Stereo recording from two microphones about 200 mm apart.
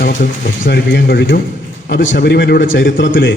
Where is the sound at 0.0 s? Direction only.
45° left (ahead or behind).